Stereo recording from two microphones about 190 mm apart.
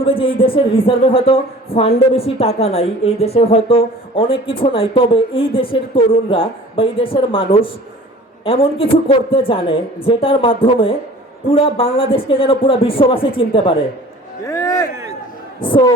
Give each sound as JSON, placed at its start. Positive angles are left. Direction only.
{"t": 0.0, "sound": "a woman's voice", "side_deg": 30}
{"t": 14.4, "sound": "music", "side_deg": 15}
{"t": 15.6, "sound": "a woman's voice", "side_deg": 25}